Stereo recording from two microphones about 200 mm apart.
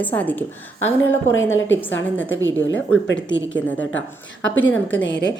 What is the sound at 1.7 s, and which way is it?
Speech, 10° left (ahead or behind).